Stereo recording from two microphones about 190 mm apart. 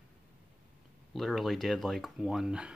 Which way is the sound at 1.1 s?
Centre (ahead or behind).